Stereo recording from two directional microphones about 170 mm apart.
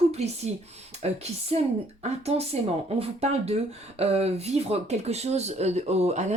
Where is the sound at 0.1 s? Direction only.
40° right (ahead or behind).